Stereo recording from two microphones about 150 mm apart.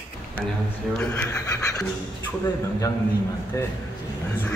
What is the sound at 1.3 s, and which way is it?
Speech, 20° left (ahead or behind).